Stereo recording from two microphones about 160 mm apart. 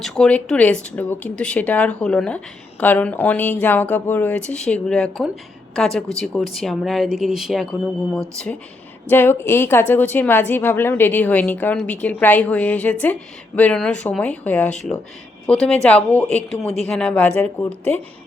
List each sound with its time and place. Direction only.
0.0 s a woman's voice: 5° left (ahead or behind)
9.0 s a woman's voice: 15° left (ahead or behind)